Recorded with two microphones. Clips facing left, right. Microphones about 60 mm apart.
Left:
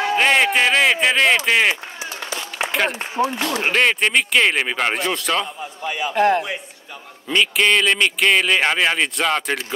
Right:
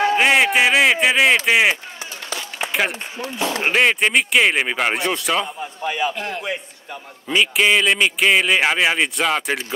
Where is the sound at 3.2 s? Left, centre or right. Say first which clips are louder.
Left 11 dB; left.